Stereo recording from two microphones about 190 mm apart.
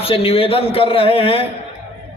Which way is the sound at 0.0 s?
30° left (ahead or behind).